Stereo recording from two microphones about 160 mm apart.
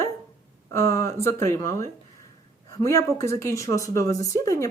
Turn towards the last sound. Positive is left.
turn(degrees=20)  # may be behind; listen again after turning